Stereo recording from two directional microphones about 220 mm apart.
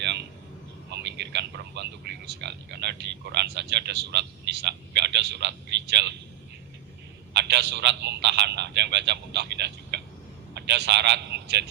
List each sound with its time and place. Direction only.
0.0 s a sound: 50° right (ahead or behind)
0.9 s speech: 50° right (ahead or behind)
7.3 s a man's voice: 50° right (ahead or behind)